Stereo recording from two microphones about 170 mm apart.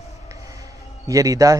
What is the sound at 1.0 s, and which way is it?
Speech, 20° right (ahead or behind).